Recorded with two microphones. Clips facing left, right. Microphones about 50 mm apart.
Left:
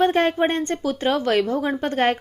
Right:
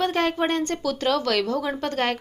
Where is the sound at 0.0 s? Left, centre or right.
Left.